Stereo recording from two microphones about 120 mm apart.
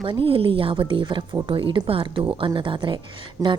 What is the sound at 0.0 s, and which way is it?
A woman's voice, 45° right (ahead or behind).